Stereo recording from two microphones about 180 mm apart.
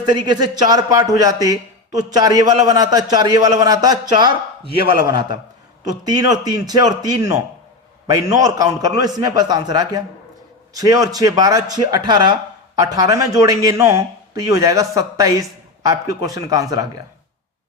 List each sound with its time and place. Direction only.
0.0 s a man's voice: 25° right (ahead or behind)